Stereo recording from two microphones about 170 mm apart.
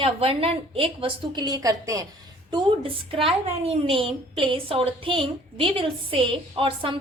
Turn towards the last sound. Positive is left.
turn(degrees=-30)  # may be behind; listen again after turning